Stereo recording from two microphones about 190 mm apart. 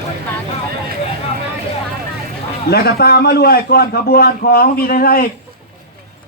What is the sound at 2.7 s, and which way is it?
A man's voice, 55° left (ahead or behind).